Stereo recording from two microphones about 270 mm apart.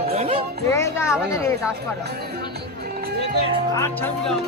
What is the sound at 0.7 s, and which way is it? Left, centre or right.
Music, centre.